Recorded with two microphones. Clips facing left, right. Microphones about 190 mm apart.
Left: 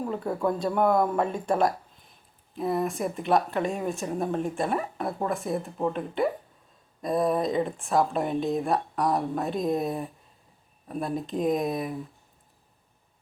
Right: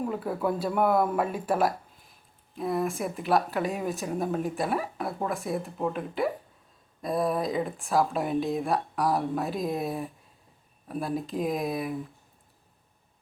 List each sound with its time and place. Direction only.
0.1 s speech: 5° right (ahead or behind)